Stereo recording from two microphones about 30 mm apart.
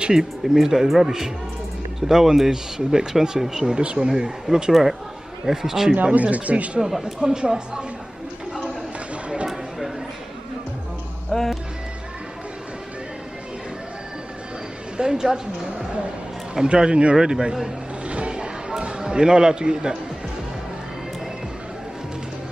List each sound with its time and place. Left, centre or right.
0.0 s speech: centre
3.6 s speech: right
4.1 s speech: centre
6.3 s speech: right
6.8 s speech: centre
7.2 s speech: right
11.3 s music: centre
15.0 s a woman's voice: right
16.6 s speech: right
18.0 s music: right
18.3 s a sound: right